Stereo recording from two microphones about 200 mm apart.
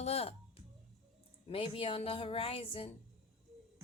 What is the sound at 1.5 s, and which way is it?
Speech, 30° left (ahead or behind).